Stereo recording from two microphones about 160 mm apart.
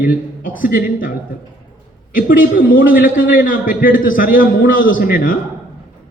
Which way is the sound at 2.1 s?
60° left (ahead or behind).